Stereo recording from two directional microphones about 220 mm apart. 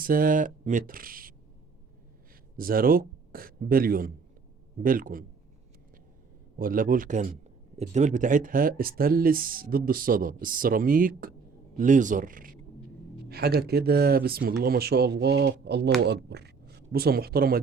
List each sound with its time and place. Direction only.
0.0 s speech: 40° right (ahead or behind)
2.6 s a man's voice: 40° right (ahead or behind)
6.6 s speech: 40° right (ahead or behind)